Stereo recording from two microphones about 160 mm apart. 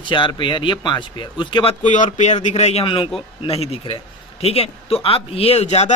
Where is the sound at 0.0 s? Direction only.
30° left (ahead or behind).